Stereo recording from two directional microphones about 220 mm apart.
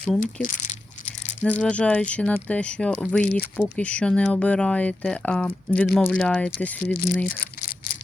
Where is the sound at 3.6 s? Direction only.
5° left (ahead or behind).